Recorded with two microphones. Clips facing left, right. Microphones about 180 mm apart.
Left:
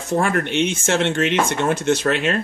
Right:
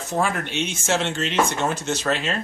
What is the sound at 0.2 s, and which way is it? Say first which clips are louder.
Speech: left 3 dB; 55° left (ahead or behind).